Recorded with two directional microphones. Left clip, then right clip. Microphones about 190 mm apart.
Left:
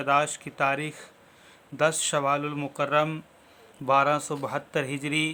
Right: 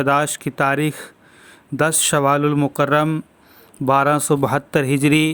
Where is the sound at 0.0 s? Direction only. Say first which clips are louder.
Right 6 dB; 45° right (ahead or behind).